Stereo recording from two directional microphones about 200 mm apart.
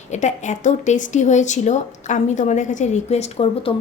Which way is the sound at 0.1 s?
35° left (ahead or behind).